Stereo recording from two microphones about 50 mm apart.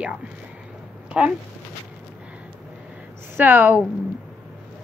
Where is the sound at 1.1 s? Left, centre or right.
Right.